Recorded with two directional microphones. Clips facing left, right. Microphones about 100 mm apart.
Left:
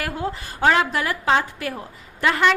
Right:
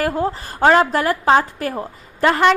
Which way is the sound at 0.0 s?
35° right (ahead or behind).